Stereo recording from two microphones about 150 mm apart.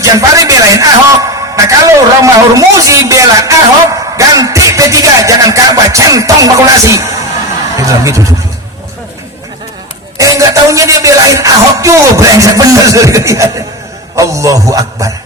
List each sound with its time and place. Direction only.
0.0 s a man's voice: 20° right (ahead or behind)
10.2 s a man's voice: 20° right (ahead or behind)